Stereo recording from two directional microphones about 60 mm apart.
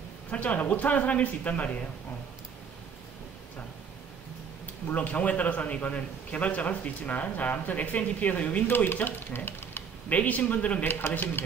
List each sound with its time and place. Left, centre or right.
0.3 s a man's voice: left
4.9 s a man's voice: left
10.0 s a man's voice: left
10.8 s speech: left